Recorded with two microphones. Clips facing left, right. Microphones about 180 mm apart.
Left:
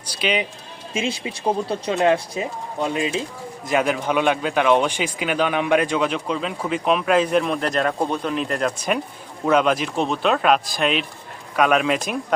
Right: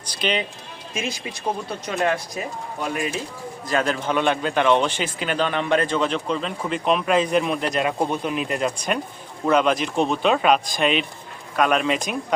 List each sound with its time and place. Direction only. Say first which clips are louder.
0.1 s speech: left 1 dB; 10° left (ahead or behind)
0.9 s speech: left 4 dB; 25° left (ahead or behind)
3.7 s a man's voice: left 2 dB; 15° left (ahead or behind)